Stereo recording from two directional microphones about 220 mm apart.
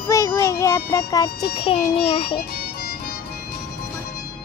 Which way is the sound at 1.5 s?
25° left (ahead or behind).